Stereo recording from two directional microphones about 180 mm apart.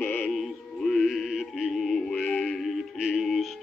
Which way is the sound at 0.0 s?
10° left (ahead or behind).